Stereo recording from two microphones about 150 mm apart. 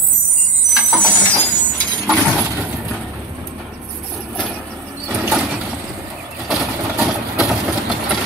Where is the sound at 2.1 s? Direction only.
10° right (ahead or behind).